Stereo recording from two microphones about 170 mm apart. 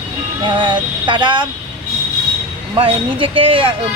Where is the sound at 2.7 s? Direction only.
30° right (ahead or behind).